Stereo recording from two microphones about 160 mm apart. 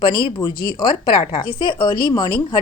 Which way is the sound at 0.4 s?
30° left (ahead or behind).